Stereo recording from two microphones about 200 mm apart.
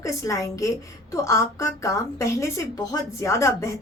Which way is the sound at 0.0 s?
15° left (ahead or behind).